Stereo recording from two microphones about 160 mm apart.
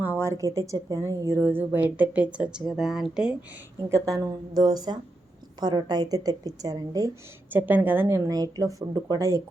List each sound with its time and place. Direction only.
0.0 s a woman's voice: 15° right (ahead or behind)
3.8 s a woman's voice: 20° right (ahead or behind)
7.5 s a woman's voice: 10° right (ahead or behind)